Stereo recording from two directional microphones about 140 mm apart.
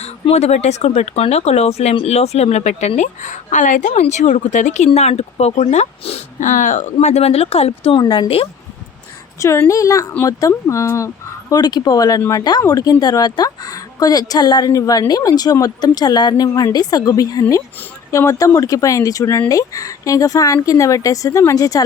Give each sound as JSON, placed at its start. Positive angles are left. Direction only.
{"t": 0.0, "sound": "speech", "side_deg": 50}
{"t": 8.0, "sound": "a woman's voice", "side_deg": 30}
{"t": 9.4, "sound": "a woman's voice", "side_deg": 20}